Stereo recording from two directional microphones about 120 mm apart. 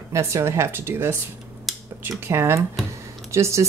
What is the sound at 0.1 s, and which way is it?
Speech, 25° right (ahead or behind).